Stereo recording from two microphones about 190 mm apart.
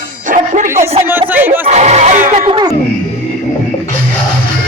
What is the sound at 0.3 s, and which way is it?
Music, 40° right (ahead or behind).